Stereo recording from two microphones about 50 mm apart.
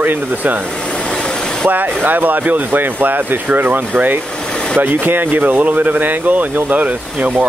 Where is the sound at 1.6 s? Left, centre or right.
Right.